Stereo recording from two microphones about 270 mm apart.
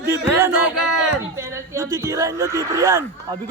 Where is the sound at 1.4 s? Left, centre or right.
Centre.